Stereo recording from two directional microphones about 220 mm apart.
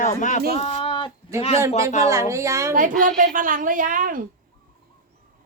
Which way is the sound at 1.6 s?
15° right (ahead or behind).